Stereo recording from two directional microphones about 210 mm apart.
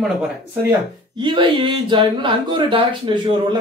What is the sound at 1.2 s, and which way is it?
Speech, 25° right (ahead or behind).